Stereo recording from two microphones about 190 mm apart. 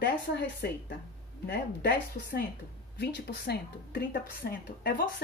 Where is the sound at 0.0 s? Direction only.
60° left (ahead or behind).